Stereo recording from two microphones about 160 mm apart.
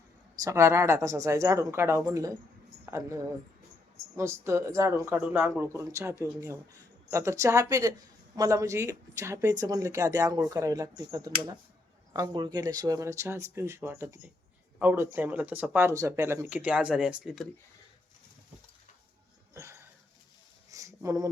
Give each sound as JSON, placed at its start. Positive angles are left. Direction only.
{"t": 0.4, "sound": "speech", "side_deg": -15}
{"t": 4.2, "sound": "speech", "side_deg": -15}
{"t": 19.5, "sound": "a sound", "side_deg": -15}